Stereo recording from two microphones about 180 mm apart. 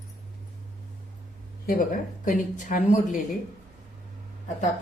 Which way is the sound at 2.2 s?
45° left (ahead or behind).